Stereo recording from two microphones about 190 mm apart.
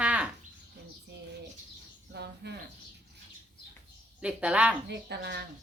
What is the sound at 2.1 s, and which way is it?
Speech, 60° right (ahead or behind).